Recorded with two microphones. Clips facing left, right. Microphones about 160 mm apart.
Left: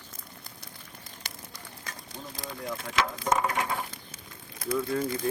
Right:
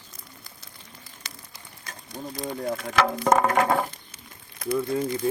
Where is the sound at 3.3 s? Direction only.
55° right (ahead or behind).